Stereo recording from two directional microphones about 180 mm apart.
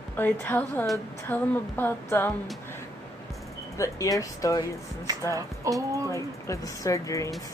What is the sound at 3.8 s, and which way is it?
Speech, 20° left (ahead or behind).